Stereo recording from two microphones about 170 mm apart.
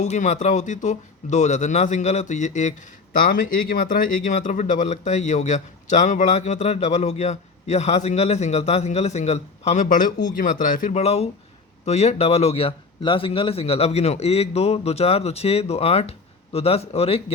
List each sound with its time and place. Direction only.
0.0 s speech: 45° left (ahead or behind)
4.3 s a man's voice: 45° left (ahead or behind)